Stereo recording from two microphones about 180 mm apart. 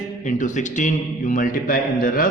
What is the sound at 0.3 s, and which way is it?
A man's voice, 45° left (ahead or behind).